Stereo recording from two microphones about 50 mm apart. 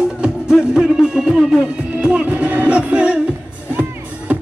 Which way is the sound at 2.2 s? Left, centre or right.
Right.